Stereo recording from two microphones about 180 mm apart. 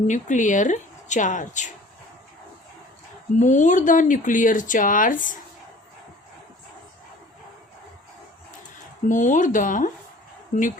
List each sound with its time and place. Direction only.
0.1 s speech: 45° left (ahead or behind)
3.3 s speech: 45° left (ahead or behind)
9.0 s speech: 45° left (ahead or behind)